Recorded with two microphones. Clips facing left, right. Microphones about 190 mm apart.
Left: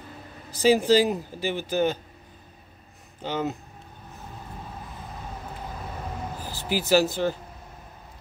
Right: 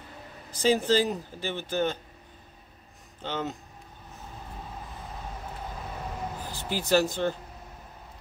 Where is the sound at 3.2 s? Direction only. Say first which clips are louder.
Left 4 dB; 10° left (ahead or behind).